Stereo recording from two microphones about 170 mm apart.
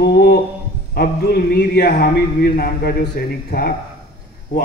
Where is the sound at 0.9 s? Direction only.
65° left (ahead or behind).